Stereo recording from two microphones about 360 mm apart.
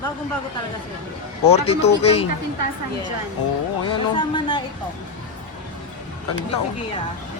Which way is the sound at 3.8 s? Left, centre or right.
Centre.